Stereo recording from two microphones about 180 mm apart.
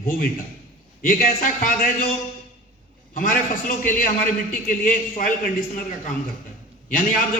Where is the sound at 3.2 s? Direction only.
50° left (ahead or behind).